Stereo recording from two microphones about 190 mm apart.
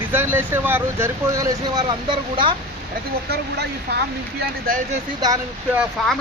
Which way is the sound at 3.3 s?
55° right (ahead or behind).